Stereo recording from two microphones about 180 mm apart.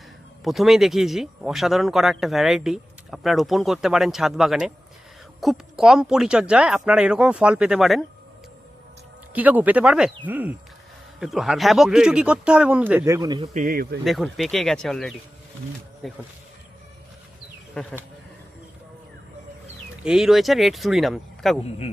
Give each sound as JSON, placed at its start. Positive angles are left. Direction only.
{"t": 0.4, "sound": "speech", "side_deg": 0}
{"t": 9.3, "sound": "speech", "side_deg": -10}
{"t": 13.4, "sound": "speech", "side_deg": -40}
{"t": 13.7, "sound": "speech", "side_deg": -55}
{"t": 14.0, "sound": "speech", "side_deg": 0}
{"t": 17.8, "sound": "speech", "side_deg": 5}
{"t": 20.0, "sound": "speech", "side_deg": -5}